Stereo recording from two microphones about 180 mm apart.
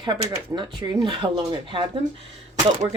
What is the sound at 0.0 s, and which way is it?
Speech, 25° right (ahead or behind).